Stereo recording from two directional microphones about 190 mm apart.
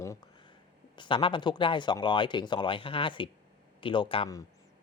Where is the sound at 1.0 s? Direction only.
25° left (ahead or behind).